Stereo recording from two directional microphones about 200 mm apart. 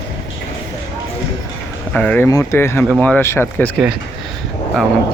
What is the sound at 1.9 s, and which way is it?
A man's voice, 5° left (ahead or behind).